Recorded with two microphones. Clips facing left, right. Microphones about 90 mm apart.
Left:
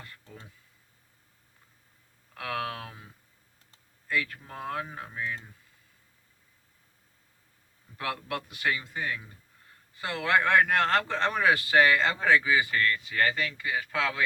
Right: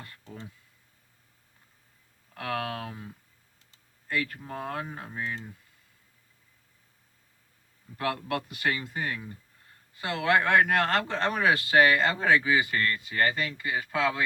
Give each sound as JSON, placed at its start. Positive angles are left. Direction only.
{"t": 2.3, "sound": "speech", "side_deg": -40}
{"t": 4.2, "sound": "speech", "side_deg": -40}
{"t": 7.9, "sound": "speech", "side_deg": -45}
{"t": 13.9, "sound": "speech", "side_deg": -15}